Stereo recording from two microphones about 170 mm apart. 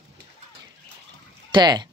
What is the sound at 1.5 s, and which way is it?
Speech, 25° right (ahead or behind).